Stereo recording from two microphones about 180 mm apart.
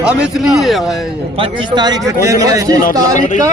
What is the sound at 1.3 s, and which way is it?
A man's voice, 25° right (ahead or behind).